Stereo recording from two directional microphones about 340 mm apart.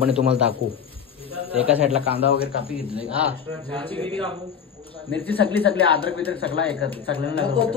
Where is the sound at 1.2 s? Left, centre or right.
Centre.